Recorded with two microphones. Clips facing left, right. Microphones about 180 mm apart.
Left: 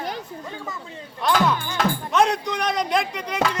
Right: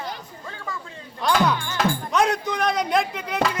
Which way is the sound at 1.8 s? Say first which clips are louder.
Left 1 dB; centre (ahead or behind).